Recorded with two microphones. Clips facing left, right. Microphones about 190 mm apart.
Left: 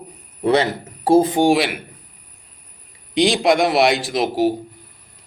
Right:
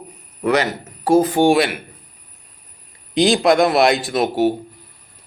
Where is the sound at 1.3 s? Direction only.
15° left (ahead or behind).